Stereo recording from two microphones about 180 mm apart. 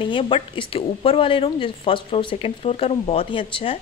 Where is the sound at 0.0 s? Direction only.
25° left (ahead or behind).